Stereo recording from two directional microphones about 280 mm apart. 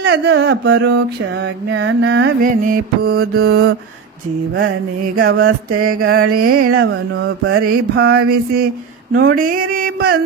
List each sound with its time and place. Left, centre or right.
0.0 s mantra: right
6.7 s mantra: right